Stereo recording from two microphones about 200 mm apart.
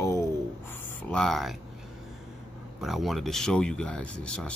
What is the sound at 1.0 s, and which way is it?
Speech, centre (ahead or behind).